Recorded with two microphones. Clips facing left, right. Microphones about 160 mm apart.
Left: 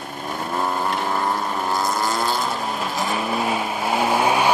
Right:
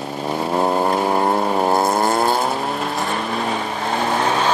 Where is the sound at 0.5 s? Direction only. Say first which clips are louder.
Right 6 dB; 40° right (ahead or behind); by 2.5 s 60° right (ahead or behind).